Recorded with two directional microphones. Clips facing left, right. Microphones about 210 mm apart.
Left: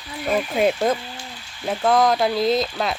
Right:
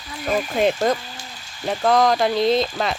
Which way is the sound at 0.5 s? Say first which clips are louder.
Even; 5° left (ahead or behind).